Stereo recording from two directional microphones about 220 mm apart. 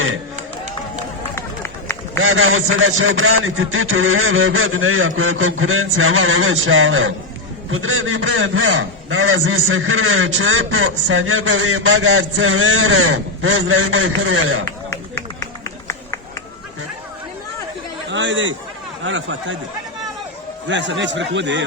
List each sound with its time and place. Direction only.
1.4 s run: 10° left (ahead or behind)
2.1 s a man's voice: 65° right (ahead or behind)
18.1 s chatter: 55° right (ahead or behind)
19.0 s a man's voice: 60° right (ahead or behind)
20.7 s a man's voice: 55° right (ahead or behind)